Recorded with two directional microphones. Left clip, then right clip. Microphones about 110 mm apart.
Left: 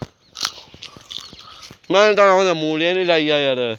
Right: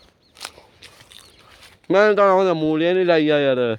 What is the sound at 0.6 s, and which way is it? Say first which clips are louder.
Biting: left 7 dB; 90° right.